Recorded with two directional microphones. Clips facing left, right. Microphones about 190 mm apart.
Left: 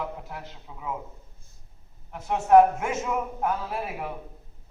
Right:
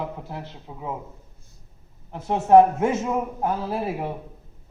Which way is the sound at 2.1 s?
30° right (ahead or behind).